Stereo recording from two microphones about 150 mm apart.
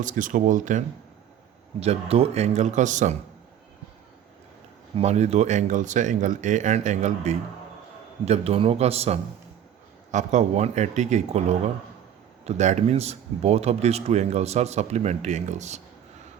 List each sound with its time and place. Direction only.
0.0 s speech: 60° right (ahead or behind)
1.8 s speech: 45° right (ahead or behind)
4.9 s speech: 50° right (ahead or behind)